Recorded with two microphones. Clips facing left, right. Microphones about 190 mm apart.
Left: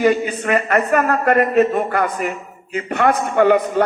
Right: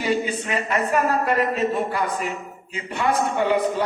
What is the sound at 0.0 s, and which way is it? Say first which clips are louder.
A man's voice: left 7 dB; 55° left (ahead or behind).